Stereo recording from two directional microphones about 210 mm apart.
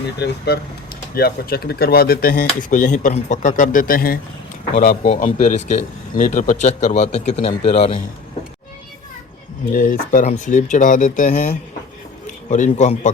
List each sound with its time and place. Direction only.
0.2 s speech: 50° left (ahead or behind)
4.8 s speech: 35° left (ahead or behind)
9.7 s speech: 40° left (ahead or behind)